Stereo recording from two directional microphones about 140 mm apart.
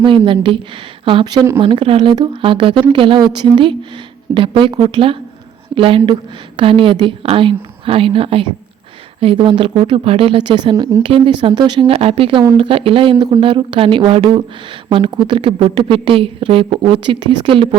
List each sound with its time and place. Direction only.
0.0 s a woman's voice: 35° right (ahead or behind)
13.1 s a woman's voice: 30° right (ahead or behind)